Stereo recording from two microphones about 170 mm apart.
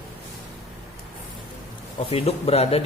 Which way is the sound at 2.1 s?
35° left (ahead or behind).